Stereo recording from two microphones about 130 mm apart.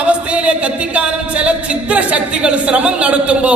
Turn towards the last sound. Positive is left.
turn(degrees=-10)  # may be behind; listen again after turning